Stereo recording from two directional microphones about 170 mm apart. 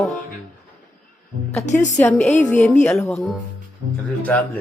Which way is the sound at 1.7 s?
45° left (ahead or behind).